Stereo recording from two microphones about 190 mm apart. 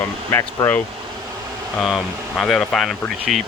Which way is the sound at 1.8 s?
Centre (ahead or behind).